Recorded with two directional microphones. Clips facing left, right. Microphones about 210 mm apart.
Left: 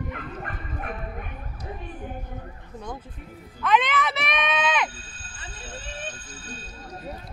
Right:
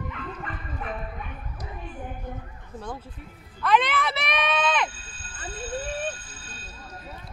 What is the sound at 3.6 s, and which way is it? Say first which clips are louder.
Music: even; centre (ahead or behind).